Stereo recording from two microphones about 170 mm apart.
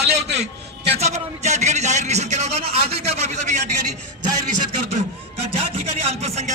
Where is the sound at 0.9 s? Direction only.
40° right (ahead or behind).